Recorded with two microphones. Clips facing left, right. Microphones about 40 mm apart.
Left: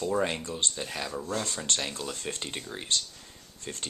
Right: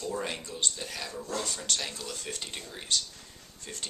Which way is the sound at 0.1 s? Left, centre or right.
Left.